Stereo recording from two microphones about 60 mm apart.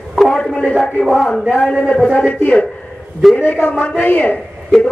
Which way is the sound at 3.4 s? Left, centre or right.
Left.